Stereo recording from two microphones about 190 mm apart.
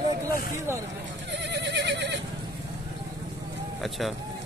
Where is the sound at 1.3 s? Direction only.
65° right (ahead or behind).